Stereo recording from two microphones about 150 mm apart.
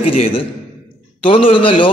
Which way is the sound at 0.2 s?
40° left (ahead or behind).